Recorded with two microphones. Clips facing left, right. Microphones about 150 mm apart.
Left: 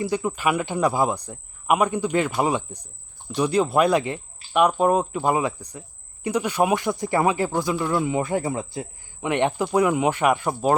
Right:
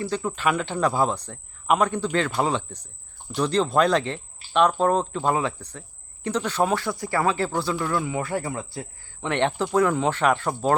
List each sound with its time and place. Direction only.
0.0 s speech: 10° left (ahead or behind)